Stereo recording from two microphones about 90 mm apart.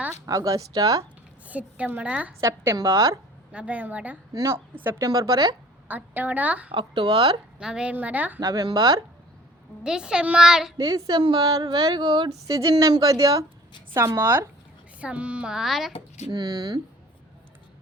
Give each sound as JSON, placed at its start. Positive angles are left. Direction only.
{"t": 0.3, "sound": "a woman's voice", "side_deg": -40}
{"t": 1.5, "sound": "a child's voice", "side_deg": -15}
{"t": 2.4, "sound": "a woman's voice", "side_deg": -35}
{"t": 3.5, "sound": "a child's voice", "side_deg": -15}
{"t": 4.3, "sound": "a woman's voice", "side_deg": -35}
{"t": 5.9, "sound": "a woman's voice", "side_deg": -20}
{"t": 6.7, "sound": "speech", "side_deg": -65}
{"t": 7.6, "sound": "a child's voice", "side_deg": -10}
{"t": 8.4, "sound": "speech", "side_deg": -45}
{"t": 9.8, "sound": "a child's voice", "side_deg": -10}
{"t": 10.8, "sound": "speech", "side_deg": -40}
{"t": 12.5, "sound": "a woman's voice", "side_deg": -40}
{"t": 15.0, "sound": "a child's voice", "side_deg": -15}
{"t": 16.3, "sound": "speech", "side_deg": -45}